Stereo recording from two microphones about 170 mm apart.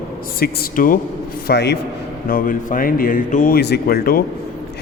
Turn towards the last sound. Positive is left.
turn(degrees=60)  # may be behind; listen again after turning